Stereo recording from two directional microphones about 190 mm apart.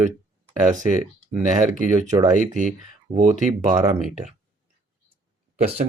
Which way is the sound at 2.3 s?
40° right (ahead or behind).